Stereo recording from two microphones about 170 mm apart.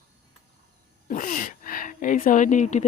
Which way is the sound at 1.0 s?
55° left (ahead or behind).